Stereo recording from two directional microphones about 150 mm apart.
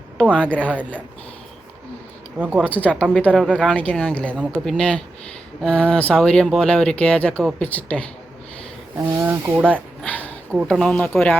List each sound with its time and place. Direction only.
0.2 s speech: 10° left (ahead or behind)
2.6 s speech: 10° left (ahead or behind)
9.0 s speech: 20° right (ahead or behind)
10.0 s a sound: 10° left (ahead or behind)
10.7 s speech: 5° left (ahead or behind)